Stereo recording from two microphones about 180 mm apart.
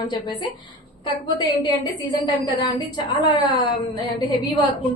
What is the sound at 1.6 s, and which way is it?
A woman's voice, 25° left (ahead or behind).